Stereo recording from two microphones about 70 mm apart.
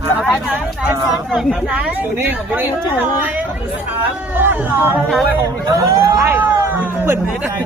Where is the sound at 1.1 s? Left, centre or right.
Centre.